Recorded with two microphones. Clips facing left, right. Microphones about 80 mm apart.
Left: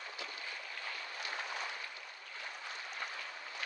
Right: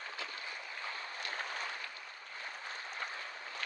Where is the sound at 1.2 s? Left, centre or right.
Right.